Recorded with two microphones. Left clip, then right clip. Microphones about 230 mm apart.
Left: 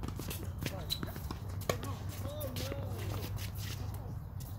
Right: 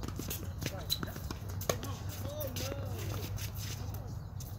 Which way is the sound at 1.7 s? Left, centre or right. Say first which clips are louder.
Right 1 dB; centre.